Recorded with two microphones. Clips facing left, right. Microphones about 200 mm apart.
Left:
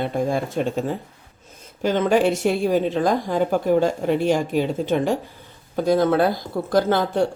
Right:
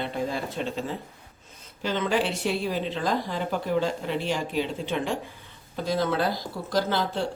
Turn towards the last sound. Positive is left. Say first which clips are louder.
# left 7 dB
turn(degrees=50)  # may be behind; listen again after turning